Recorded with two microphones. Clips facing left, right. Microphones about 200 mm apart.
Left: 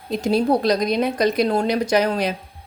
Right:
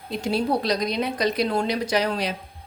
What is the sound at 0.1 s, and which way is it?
A woman's voice, 45° left (ahead or behind).